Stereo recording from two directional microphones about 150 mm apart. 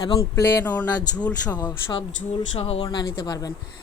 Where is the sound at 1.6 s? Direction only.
30° left (ahead or behind).